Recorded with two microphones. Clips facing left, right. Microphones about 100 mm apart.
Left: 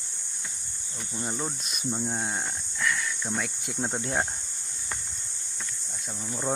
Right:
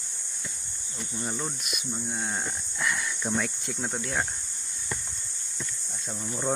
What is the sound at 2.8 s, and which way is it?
Snake, 20° right (ahead or behind).